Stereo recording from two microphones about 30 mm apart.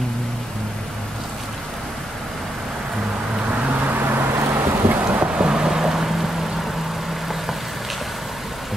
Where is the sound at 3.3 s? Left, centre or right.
Right.